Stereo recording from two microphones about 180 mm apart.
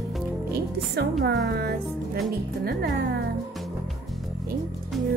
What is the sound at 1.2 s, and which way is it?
Speech, 65° right (ahead or behind).